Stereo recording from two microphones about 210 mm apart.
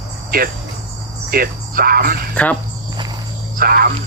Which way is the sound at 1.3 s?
45° right (ahead or behind).